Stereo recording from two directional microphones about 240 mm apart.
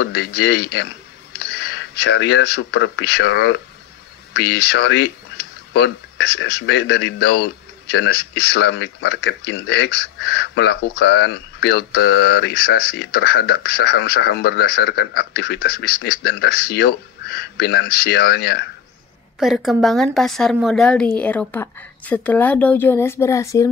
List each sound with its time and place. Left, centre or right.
0.0 s speech: left
19.4 s a woman's voice: centre